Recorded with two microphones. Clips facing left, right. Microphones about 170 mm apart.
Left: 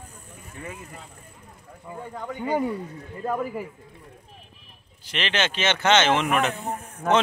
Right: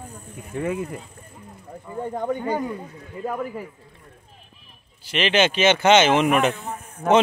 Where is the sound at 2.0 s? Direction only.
45° right (ahead or behind).